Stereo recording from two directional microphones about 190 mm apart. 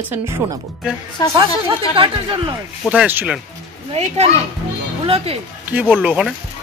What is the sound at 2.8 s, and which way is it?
Speech, 5° right (ahead or behind).